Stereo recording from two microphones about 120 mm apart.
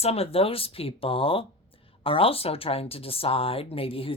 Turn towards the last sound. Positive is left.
turn(degrees=50)  # may be behind; listen again after turning